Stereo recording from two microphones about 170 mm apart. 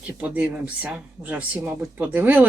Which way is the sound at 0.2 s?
10° right (ahead or behind).